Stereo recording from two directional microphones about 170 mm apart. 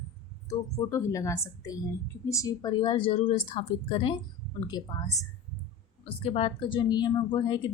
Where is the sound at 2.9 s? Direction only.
35° left (ahead or behind).